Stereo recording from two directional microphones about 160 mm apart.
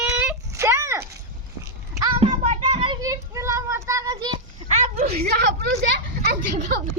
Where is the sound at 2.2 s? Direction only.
45° right (ahead or behind).